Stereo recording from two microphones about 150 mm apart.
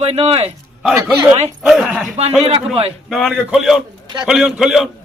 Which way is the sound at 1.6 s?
5° right (ahead or behind).